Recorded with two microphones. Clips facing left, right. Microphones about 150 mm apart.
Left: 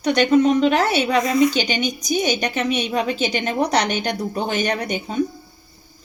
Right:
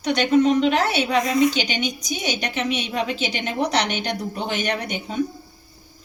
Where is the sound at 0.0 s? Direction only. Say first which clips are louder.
Left 2 dB; 45° left (ahead or behind).